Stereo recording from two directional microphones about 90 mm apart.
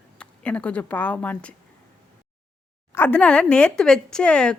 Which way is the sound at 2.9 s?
20° left (ahead or behind).